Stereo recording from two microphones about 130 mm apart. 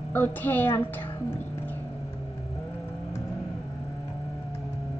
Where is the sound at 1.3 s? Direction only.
15° left (ahead or behind).